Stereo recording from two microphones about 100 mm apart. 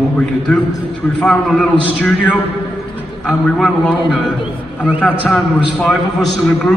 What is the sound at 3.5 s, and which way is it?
Speech, centre (ahead or behind).